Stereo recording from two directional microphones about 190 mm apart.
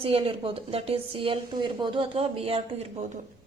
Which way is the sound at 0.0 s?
30° right (ahead or behind).